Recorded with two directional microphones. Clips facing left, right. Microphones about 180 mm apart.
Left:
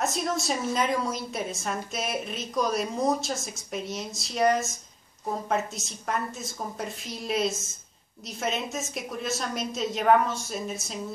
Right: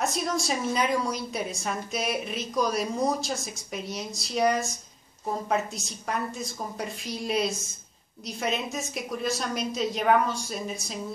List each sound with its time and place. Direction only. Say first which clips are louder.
0.0 s a woman's voice: even; centre (ahead or behind)